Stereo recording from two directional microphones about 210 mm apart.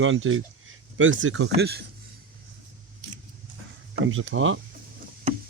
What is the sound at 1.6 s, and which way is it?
Speech, 50° right (ahead or behind).